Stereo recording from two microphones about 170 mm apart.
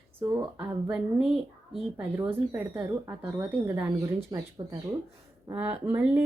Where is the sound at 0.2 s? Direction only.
15° right (ahead or behind).